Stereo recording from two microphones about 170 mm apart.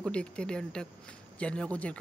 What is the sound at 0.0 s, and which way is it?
Speech, 5° left (ahead or behind).